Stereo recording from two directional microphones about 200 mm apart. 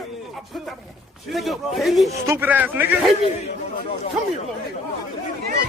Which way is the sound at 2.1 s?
10° right (ahead or behind).